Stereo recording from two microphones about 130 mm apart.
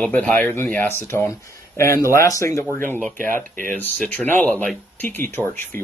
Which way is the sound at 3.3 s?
90° right.